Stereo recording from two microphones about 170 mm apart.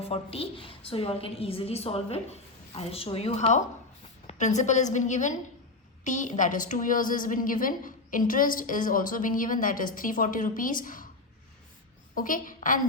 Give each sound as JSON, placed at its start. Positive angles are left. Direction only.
{"t": 0.0, "sound": "a woman's voice", "side_deg": 35}
{"t": 12.1, "sound": "a woman's voice", "side_deg": 50}